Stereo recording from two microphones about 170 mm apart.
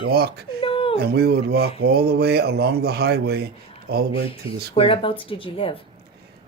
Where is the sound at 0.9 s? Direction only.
70° right (ahead or behind).